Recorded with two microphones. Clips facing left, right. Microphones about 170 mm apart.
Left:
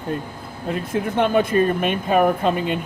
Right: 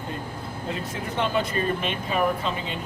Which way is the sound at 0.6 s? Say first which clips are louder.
Left 9 dB; 55° left (ahead or behind).